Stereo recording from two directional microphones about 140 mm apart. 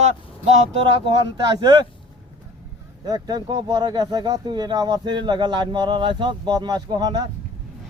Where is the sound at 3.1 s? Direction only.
30° right (ahead or behind).